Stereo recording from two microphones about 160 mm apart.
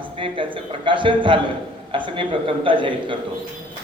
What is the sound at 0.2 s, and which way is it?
A man's voice, 30° right (ahead or behind).